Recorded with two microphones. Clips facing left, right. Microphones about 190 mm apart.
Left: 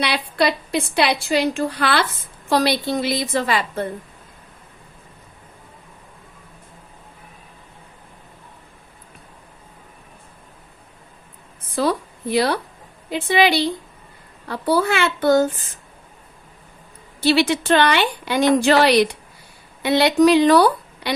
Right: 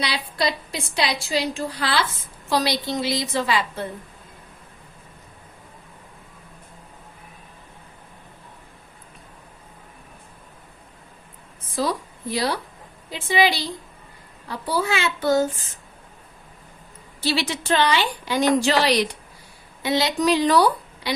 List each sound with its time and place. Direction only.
0.0 s a woman's voice: 60° left (ahead or behind)
11.8 s a woman's voice: 60° left (ahead or behind)
17.2 s a woman's voice: 60° left (ahead or behind)